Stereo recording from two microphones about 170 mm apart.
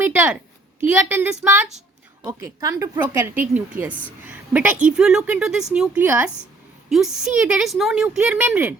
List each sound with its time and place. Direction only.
0.0 s a woman's voice: 10° right (ahead or behind)
2.2 s a woman's voice: 20° right (ahead or behind)